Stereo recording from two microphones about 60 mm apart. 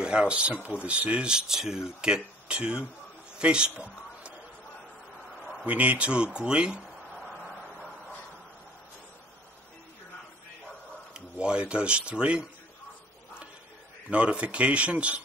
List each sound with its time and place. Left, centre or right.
0.0 s a man's voice: centre
5.7 s speech: right
11.1 s speech: centre
14.1 s speech: right